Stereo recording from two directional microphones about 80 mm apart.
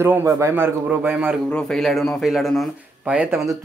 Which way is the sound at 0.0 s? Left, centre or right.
Right.